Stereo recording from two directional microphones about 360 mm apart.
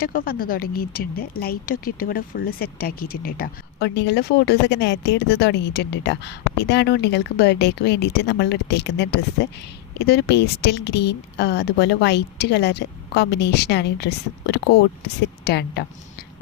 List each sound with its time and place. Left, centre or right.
0.0 s speech: left